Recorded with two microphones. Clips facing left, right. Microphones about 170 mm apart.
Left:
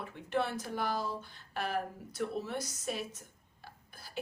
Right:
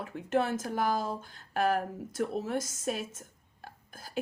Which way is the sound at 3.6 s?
45° right (ahead or behind).